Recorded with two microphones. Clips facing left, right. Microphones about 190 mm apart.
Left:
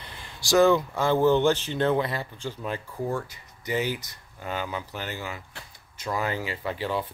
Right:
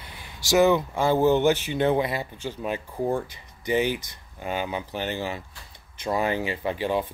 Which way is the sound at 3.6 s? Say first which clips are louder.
Right 4 dB; 20° right (ahead or behind).